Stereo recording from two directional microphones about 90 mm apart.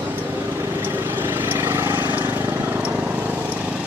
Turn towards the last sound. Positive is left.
turn(degrees=-15)  # may be behind; listen again after turning